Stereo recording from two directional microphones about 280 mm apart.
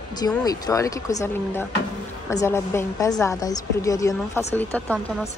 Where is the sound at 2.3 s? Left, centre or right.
Centre.